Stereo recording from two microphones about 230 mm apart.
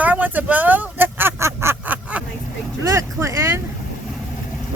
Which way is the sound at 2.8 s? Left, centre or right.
Centre.